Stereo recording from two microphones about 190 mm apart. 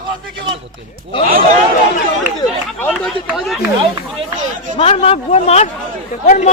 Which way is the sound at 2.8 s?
Centre (ahead or behind).